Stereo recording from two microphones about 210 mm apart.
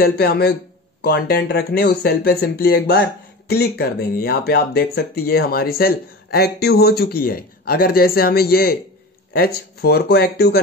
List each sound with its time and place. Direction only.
0.0 s speech: 50° left (ahead or behind)